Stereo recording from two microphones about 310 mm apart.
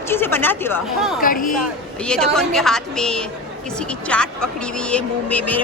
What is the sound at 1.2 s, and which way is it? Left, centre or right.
Speech, left.